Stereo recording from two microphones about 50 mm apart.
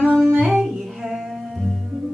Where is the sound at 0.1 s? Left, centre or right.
Centre.